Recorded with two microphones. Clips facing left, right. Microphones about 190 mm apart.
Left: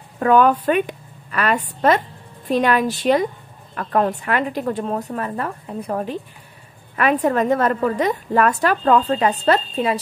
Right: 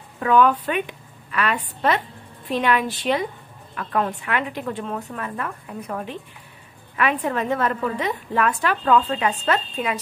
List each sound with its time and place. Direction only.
0.2 s a woman's voice: 45° left (ahead or behind)